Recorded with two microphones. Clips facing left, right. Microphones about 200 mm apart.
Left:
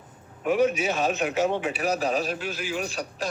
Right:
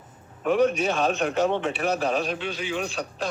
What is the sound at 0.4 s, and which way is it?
A man's voice, 5° left (ahead or behind).